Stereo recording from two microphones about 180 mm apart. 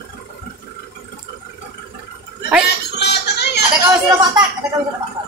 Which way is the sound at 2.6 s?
70° left (ahead or behind).